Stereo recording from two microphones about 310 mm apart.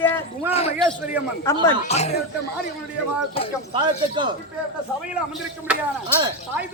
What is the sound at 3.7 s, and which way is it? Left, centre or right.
Speech, centre.